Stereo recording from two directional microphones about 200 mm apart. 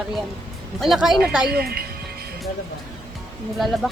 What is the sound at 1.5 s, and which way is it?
Speech, 50° right (ahead or behind).